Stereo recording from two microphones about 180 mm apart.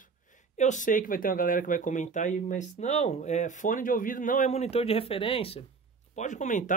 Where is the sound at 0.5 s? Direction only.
40° left (ahead or behind).